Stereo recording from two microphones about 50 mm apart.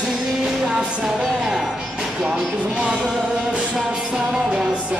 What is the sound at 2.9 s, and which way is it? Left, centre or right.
Music, centre.